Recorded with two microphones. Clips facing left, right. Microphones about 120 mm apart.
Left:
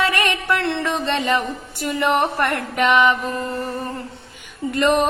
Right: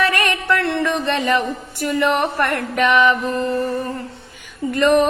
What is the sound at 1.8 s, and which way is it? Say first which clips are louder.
Music: right 1 dB; 20° left (ahead or behind).